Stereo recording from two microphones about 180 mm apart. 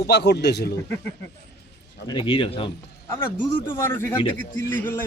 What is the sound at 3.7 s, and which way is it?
Speech, 15° left (ahead or behind).